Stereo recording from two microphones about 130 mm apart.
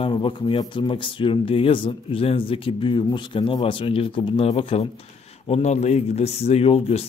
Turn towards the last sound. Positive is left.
turn(degrees=50)  # may be behind; listen again after turning